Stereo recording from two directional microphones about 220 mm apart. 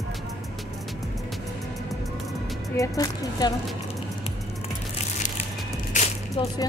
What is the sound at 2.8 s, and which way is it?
Speech, 15° left (ahead or behind).